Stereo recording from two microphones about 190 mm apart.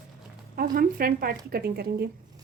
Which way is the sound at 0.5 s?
50° right (ahead or behind).